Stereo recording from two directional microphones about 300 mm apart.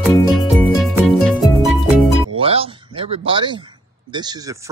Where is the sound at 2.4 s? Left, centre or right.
Centre.